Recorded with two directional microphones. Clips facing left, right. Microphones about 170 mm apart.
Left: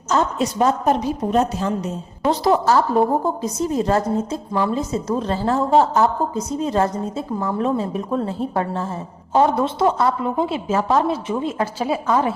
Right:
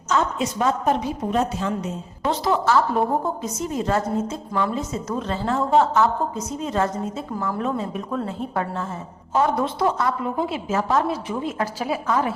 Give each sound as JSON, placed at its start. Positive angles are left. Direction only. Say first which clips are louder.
{"t": 0.1, "sound": "a woman's voice", "louder": "left 3 dB", "side_deg": 40}